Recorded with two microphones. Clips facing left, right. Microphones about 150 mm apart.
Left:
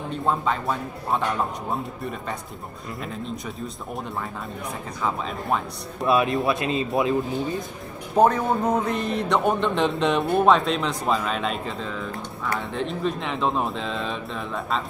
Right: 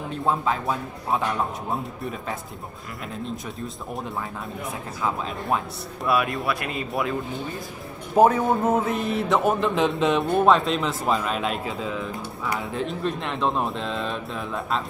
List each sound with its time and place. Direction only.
0.1 s a man's voice: centre (ahead or behind)
6.0 s speech: 25° left (ahead or behind)
8.1 s a man's voice: 5° right (ahead or behind)